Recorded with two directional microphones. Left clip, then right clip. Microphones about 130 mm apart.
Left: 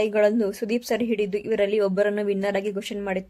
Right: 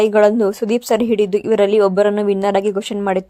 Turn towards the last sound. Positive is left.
turn(degrees=-35)  # may be behind; listen again after turning